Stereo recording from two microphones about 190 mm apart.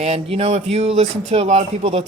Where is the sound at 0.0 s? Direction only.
35° right (ahead or behind).